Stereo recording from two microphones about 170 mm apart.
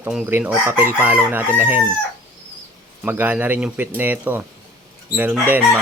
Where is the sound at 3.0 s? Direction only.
10° right (ahead or behind).